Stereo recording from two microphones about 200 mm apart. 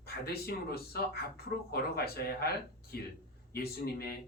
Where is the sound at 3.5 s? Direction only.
50° left (ahead or behind).